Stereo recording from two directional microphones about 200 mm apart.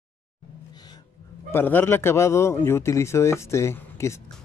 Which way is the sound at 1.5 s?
10° left (ahead or behind).